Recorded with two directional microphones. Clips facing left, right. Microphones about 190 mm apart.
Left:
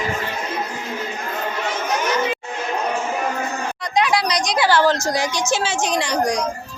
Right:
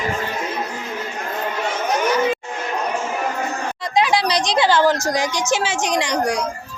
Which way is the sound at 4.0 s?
25° right (ahead or behind).